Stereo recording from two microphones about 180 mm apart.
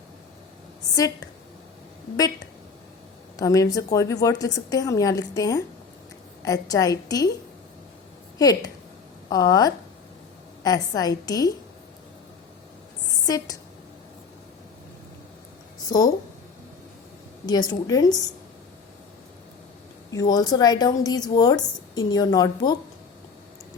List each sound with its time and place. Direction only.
0.9 s a woman's voice: 20° left (ahead or behind)
8.4 s a woman's voice: 20° left (ahead or behind)
13.2 s a woman's voice: 20° left (ahead or behind)
15.9 s a woman's voice: 20° left (ahead or behind)
17.4 s a woman's voice: 20° left (ahead or behind)
20.1 s a woman's voice: 20° left (ahead or behind)